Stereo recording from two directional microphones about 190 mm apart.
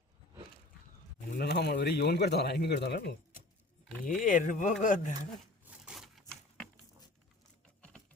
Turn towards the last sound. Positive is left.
turn(degrees=0)  # may be behind; listen again after turning